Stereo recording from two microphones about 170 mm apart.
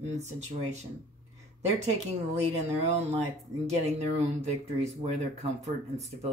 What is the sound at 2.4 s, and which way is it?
Speech, 40° right (ahead or behind).